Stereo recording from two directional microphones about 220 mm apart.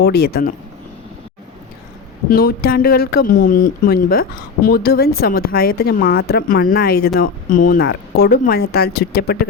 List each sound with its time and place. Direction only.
0.0 s speech: 45° left (ahead or behind)
2.3 s speech: 45° left (ahead or behind)